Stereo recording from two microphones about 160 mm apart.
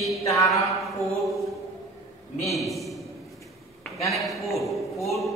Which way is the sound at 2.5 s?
Centre (ahead or behind).